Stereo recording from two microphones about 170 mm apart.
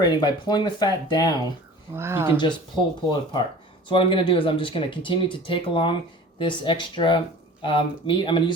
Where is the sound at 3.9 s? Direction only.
30° left (ahead or behind).